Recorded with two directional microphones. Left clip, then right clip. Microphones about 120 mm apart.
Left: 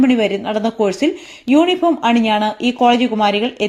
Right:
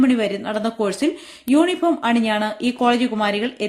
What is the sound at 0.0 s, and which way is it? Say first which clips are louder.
Speech: left 4 dB; 25° left (ahead or behind).